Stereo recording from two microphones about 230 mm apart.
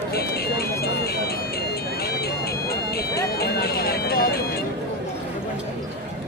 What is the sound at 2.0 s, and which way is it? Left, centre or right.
Ice cream truck, left.